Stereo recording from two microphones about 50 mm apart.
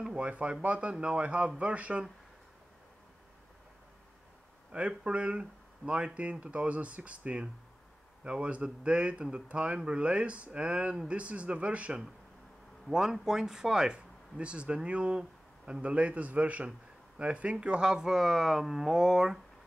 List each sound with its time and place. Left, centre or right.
0.2 s speech: right
4.7 s speech: right
12.9 s speech: centre